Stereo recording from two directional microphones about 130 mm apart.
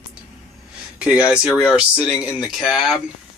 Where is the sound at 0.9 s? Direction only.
10° right (ahead or behind).